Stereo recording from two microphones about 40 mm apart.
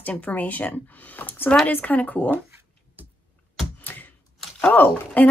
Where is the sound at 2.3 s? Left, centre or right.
Right.